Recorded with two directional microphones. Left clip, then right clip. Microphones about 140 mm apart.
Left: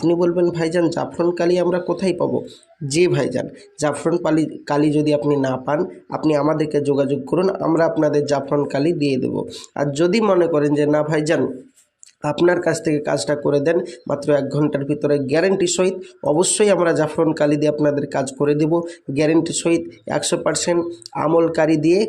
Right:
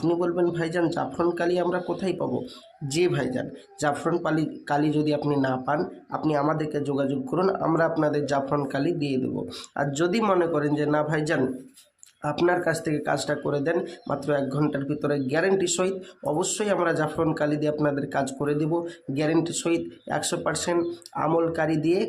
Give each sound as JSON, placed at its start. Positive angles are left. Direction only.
{"t": 0.1, "sound": "speech", "side_deg": 30}
{"t": 7.3, "sound": "speech", "side_deg": 20}
{"t": 12.5, "sound": "speech", "side_deg": 30}